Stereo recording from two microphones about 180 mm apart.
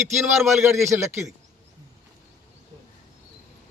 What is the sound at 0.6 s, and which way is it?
Speech, 15° right (ahead or behind).